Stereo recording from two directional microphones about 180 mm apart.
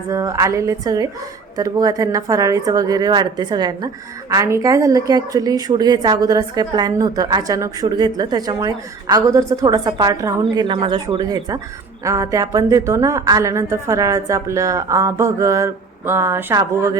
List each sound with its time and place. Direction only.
0.1 s a woman's voice: 15° right (ahead or behind)